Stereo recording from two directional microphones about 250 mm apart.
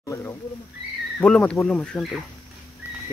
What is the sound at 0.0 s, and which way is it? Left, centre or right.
Speech, centre.